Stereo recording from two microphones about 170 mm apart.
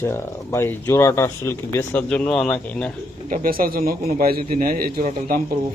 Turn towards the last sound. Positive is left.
turn(degrees=-55)  # may be behind; listen again after turning